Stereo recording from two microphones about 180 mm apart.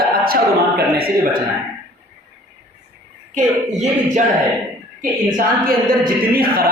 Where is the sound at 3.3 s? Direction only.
40° right (ahead or behind).